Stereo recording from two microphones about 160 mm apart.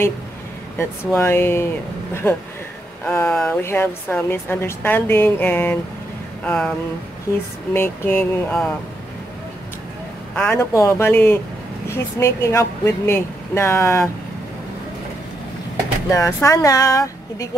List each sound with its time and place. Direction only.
0.7 s a woman's voice: 15° left (ahead or behind)
3.2 s a woman's voice: 5° left (ahead or behind)
7.7 s a woman's voice: 15° left (ahead or behind)
10.3 s a woman's voice: 10° left (ahead or behind)
16.1 s speech: 20° left (ahead or behind)